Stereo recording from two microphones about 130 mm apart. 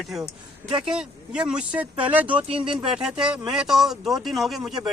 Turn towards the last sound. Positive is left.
turn(degrees=-5)  # may be behind; listen again after turning